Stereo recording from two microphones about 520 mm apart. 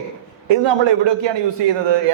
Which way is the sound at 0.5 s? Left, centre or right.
Right.